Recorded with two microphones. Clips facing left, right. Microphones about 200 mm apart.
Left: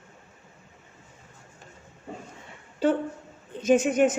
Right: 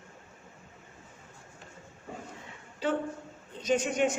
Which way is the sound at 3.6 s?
50° left (ahead or behind).